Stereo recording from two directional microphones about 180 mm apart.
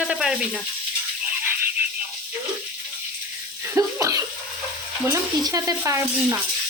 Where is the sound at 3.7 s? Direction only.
20° right (ahead or behind).